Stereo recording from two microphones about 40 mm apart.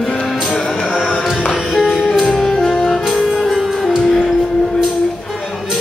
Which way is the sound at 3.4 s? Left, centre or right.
Centre.